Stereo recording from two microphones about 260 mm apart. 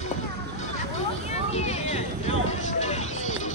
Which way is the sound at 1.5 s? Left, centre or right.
Left.